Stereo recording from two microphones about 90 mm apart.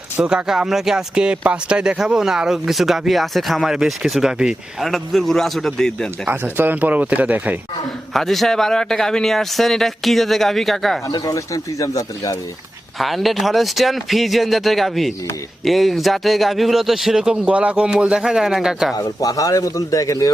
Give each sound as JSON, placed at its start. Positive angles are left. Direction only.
{"t": 0.2, "sound": "speech", "side_deg": -10}
{"t": 6.2, "sound": "speech", "side_deg": -25}
{"t": 8.1, "sound": "speech", "side_deg": 0}
{"t": 11.1, "sound": "a man's voice", "side_deg": 40}
{"t": 13.0, "sound": "speech", "side_deg": 0}
{"t": 18.9, "sound": "a man's voice", "side_deg": 40}